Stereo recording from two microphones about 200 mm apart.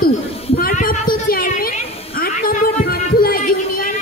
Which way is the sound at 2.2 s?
45° left (ahead or behind).